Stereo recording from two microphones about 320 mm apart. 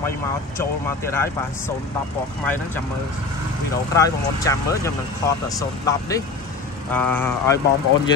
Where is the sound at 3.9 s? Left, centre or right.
Centre.